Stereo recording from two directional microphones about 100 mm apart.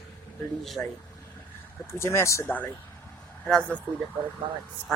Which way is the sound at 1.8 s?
25° left (ahead or behind).